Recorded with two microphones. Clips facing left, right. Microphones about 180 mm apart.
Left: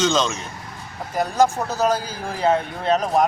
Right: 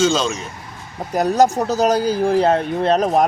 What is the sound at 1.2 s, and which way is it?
Speech, 40° right (ahead or behind).